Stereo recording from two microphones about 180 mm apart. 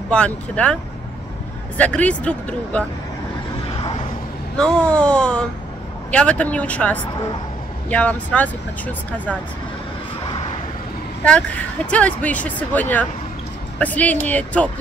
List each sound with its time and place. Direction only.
0.1 s speech: 5° left (ahead or behind)
1.8 s speech: 10° left (ahead or behind)
4.6 s speech: 5° left (ahead or behind)
11.2 s speech: 5° left (ahead or behind)